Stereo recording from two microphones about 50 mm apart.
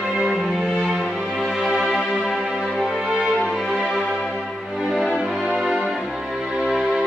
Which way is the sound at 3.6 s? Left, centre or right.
Centre.